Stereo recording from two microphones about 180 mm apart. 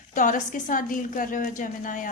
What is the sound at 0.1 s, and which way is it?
Speech, 45° left (ahead or behind).